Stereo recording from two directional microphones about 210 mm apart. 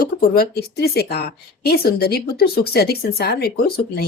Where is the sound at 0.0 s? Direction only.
50° left (ahead or behind).